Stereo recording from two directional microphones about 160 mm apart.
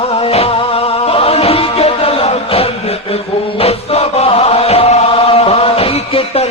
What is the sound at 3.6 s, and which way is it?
Chant, 40° left (ahead or behind).